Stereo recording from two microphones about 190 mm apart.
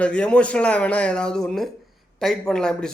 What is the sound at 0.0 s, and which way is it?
A man's voice, 5° left (ahead or behind).